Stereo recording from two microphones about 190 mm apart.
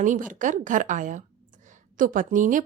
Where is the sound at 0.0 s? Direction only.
45° right (ahead or behind).